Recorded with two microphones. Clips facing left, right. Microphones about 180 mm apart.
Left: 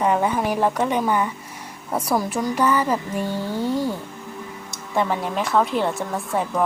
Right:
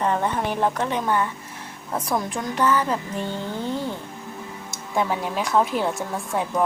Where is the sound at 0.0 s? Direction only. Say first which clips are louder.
Left 3 dB; 10° left (ahead or behind).